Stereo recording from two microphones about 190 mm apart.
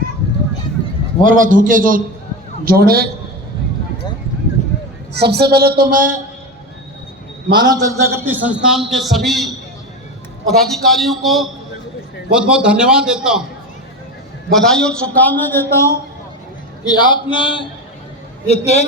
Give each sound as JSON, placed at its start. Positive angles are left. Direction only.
{"t": 1.2, "sound": "a woman's voice", "side_deg": -45}
{"t": 5.1, "sound": "a woman's voice", "side_deg": -60}
{"t": 7.5, "sound": "a man's voice", "side_deg": -20}
{"t": 10.5, "sound": "a man's voice", "side_deg": 0}
{"t": 14.5, "sound": "a man's voice", "side_deg": 5}